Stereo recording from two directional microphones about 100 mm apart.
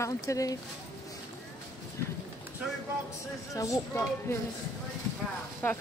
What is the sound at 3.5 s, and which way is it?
Speech, 35° left (ahead or behind).